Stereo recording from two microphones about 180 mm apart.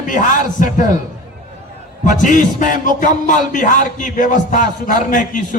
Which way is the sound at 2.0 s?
45° left (ahead or behind).